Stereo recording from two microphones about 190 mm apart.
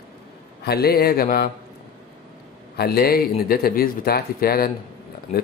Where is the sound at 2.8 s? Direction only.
55° left (ahead or behind).